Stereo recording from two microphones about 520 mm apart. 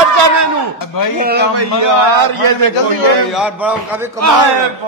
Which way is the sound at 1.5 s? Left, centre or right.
Right.